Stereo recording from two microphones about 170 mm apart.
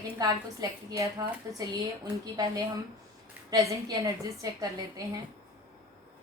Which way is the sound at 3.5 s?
20° right (ahead or behind).